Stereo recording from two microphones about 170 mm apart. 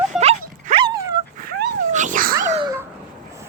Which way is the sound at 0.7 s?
25° right (ahead or behind).